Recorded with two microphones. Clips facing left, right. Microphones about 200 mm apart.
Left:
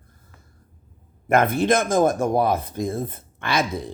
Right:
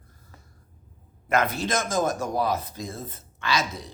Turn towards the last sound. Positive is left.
turn(degrees=55)  # may be behind; listen again after turning